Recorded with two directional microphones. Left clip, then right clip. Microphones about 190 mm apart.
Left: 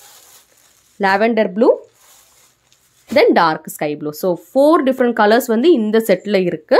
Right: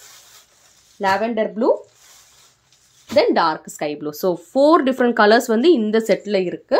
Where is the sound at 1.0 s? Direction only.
55° left (ahead or behind).